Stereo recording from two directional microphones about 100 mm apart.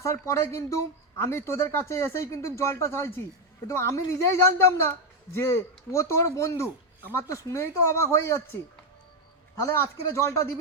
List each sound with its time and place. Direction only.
0.0 s a woman's voice: 30° left (ahead or behind)
9.6 s a woman's voice: 30° left (ahead or behind)